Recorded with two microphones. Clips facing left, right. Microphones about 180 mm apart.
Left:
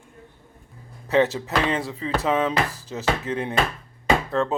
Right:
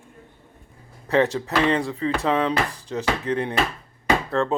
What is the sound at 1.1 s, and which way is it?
Speech, centre (ahead or behind).